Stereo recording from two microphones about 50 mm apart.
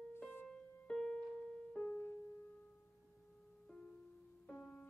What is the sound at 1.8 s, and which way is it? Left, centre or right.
Music, left.